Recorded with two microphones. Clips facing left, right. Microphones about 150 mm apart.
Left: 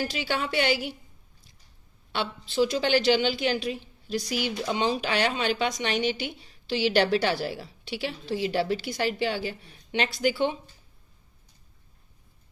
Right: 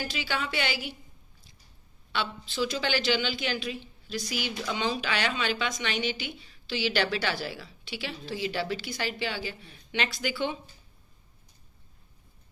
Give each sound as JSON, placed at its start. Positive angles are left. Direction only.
{"t": 0.3, "sound": "a woman's voice", "side_deg": 45}
{"t": 2.1, "sound": "a woman's voice", "side_deg": 55}
{"t": 2.7, "sound": "a woman's voice", "side_deg": 30}